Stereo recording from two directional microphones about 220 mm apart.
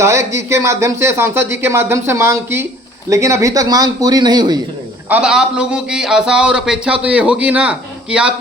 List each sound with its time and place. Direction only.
0.0 s speech: 10° right (ahead or behind)
5.0 s a man's voice: 5° right (ahead or behind)